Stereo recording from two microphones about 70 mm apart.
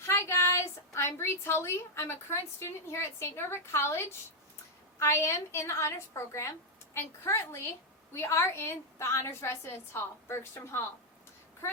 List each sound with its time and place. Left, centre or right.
0.0 s a woman's voice: left